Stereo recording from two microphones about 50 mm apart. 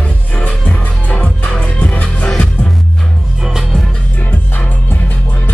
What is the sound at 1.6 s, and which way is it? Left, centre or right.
Music, left.